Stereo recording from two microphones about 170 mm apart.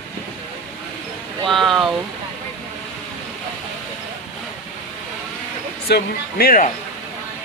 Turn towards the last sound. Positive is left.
turn(degrees=60)  # may be behind; listen again after turning